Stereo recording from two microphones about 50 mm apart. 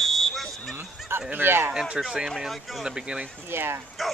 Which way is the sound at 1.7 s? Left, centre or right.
Centre.